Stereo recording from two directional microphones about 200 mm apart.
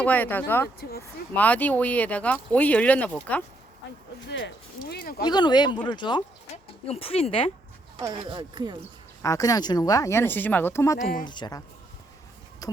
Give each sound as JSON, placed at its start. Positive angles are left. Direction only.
{"t": 0.0, "sound": "speech", "side_deg": 10}
{"t": 0.8, "sound": "speech", "side_deg": 50}
{"t": 1.3, "sound": "speech", "side_deg": 10}
{"t": 4.3, "sound": "speech", "side_deg": 60}
{"t": 5.2, "sound": "speech", "side_deg": 20}
{"t": 7.9, "sound": "speech", "side_deg": -20}
{"t": 9.2, "sound": "speech", "side_deg": 15}
{"t": 11.0, "sound": "speech", "side_deg": 40}
{"t": 11.3, "sound": "speech", "side_deg": 20}